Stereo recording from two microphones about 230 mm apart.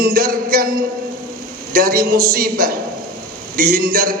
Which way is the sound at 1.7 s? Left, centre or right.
Right.